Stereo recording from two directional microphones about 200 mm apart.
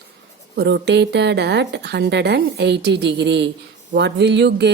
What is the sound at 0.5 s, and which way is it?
Speech, 55° right (ahead or behind).